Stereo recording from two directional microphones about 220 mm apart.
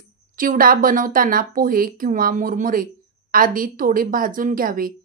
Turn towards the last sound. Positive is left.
turn(degrees=-40)  # may be behind; listen again after turning